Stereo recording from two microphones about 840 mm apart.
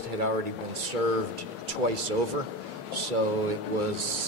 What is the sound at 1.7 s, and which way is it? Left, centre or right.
Speech, right.